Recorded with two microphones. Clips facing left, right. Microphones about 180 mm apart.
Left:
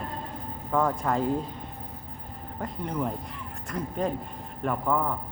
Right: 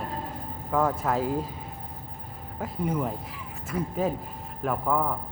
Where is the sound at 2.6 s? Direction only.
5° right (ahead or behind).